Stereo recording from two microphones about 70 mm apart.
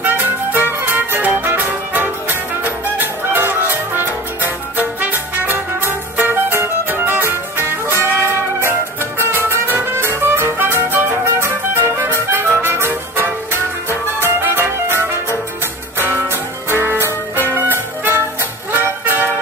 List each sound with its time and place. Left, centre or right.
0.0 s music: right